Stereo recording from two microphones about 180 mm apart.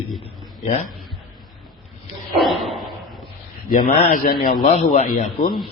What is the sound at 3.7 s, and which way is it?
A man's voice, 45° left (ahead or behind).